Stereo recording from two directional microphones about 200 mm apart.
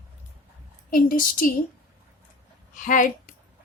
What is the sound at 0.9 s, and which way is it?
Speech, 45° left (ahead or behind).